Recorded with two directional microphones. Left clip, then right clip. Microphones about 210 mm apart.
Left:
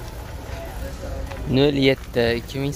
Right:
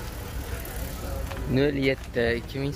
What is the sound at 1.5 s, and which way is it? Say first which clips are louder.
Speech: left 6 dB; 15° left (ahead or behind).